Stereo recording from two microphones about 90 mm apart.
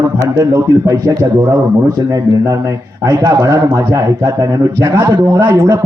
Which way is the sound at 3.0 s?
40° right (ahead or behind).